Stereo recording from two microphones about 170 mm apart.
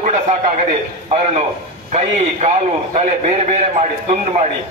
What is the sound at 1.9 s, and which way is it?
A man's voice, 40° right (ahead or behind).